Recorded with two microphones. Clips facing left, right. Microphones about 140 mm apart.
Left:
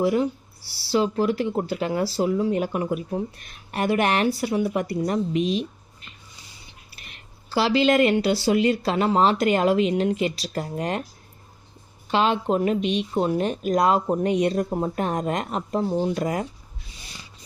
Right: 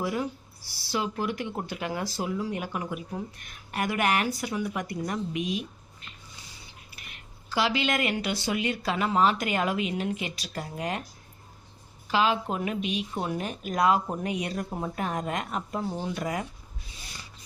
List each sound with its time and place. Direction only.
0.0 s speech: 25° left (ahead or behind)
7.5 s speech: 35° left (ahead or behind)
12.1 s speech: 30° left (ahead or behind)